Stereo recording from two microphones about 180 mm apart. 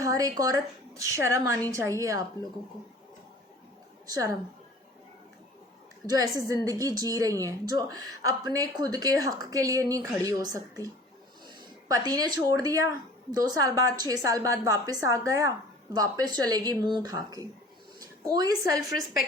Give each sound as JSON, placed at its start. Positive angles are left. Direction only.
{"t": 0.0, "sound": "a woman's voice", "side_deg": -20}
{"t": 4.0, "sound": "a woman's voice", "side_deg": -20}
{"t": 6.1, "sound": "a woman's voice", "side_deg": -20}